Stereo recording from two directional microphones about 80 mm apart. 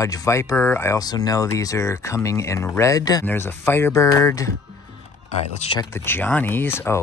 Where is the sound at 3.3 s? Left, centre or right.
Left.